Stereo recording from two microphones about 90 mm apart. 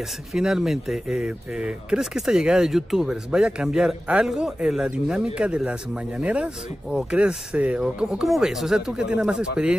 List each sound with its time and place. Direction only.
0.3 s speech: 5° right (ahead or behind)